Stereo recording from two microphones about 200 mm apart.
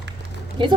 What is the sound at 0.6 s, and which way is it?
Speech, 25° right (ahead or behind).